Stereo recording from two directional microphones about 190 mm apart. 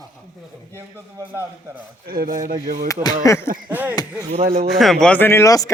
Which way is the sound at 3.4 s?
45° right (ahead or behind).